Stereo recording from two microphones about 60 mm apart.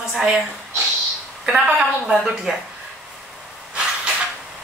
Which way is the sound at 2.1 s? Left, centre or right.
Centre.